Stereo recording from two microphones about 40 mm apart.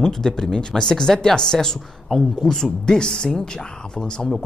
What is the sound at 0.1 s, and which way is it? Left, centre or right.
Speech, centre.